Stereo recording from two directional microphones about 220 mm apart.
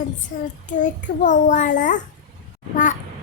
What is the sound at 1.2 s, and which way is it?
Child singing, 35° left (ahead or behind).